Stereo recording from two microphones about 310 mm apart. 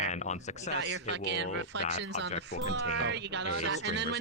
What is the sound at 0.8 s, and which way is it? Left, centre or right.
Speech, right.